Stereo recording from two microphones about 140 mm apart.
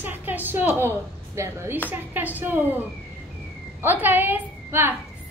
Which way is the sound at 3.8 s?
15° right (ahead or behind).